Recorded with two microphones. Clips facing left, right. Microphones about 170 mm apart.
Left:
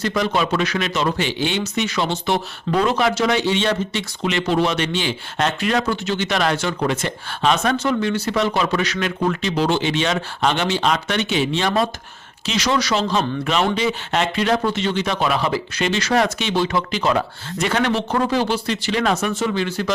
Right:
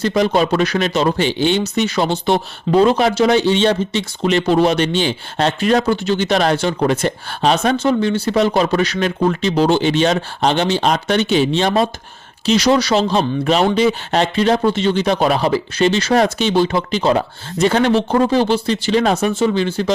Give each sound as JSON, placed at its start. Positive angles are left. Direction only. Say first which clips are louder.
{"t": 0.0, "sound": "speech", "louder": "right 5 dB", "side_deg": -35}